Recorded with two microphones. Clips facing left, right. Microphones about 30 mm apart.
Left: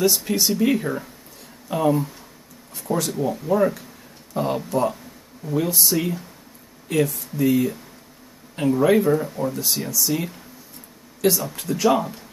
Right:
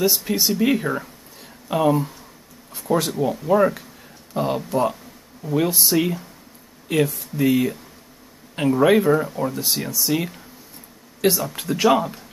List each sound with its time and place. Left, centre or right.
0.0 s speech: centre
0.6 s speech: centre
4.3 s speech: centre
5.6 s speech: right